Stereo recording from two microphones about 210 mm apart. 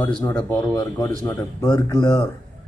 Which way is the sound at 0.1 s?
5° left (ahead or behind).